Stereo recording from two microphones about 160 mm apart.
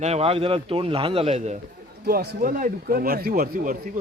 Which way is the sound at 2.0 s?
75° right (ahead or behind).